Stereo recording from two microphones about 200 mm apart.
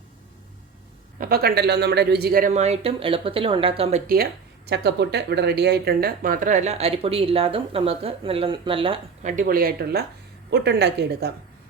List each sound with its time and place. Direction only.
1.2 s a man's voice: 50° right (ahead or behind)
2.5 s speech: 35° right (ahead or behind)
4.0 s speech: 50° right (ahead or behind); by 9.3 s 25° right (ahead or behind)
9.3 s a man's voice: 45° right (ahead or behind)